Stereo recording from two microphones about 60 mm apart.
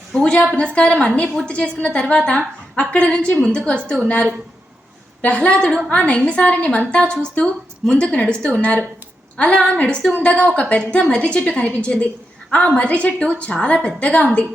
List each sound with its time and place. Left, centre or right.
0.1 s a woman's voice: centre
5.2 s a woman's voice: centre